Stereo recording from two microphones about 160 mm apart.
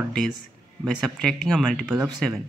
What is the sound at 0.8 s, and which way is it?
Speech, 5° left (ahead or behind).